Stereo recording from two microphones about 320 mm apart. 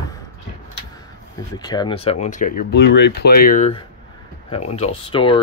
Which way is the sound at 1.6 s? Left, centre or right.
Centre.